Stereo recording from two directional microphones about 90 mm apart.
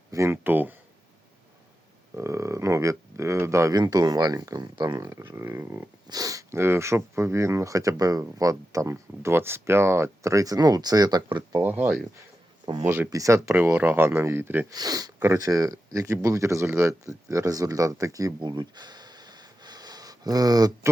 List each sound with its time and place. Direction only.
0.3 s speech: 20° right (ahead or behind)
2.1 s speech: 30° right (ahead or behind)
3.8 s speech: 45° right (ahead or behind)
5.2 s speech: 25° right (ahead or behind)
6.1 s speech: 40° right (ahead or behind)
6.5 s speech: 30° right (ahead or behind); by 11.2 s 45° right (ahead or behind)
11.3 s speech: 60° right (ahead or behind)
11.6 s speech: 20° right (ahead or behind)
13.1 s speech: 40° right (ahead or behind)
14.7 s speech: 45° right (ahead or behind)